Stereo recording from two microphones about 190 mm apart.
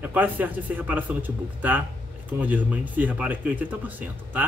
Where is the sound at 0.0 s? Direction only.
10° right (ahead or behind).